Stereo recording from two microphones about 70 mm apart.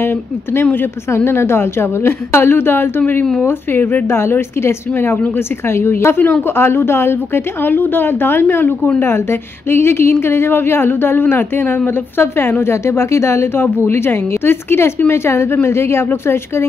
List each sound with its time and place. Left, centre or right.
0.0 s a woman's voice: left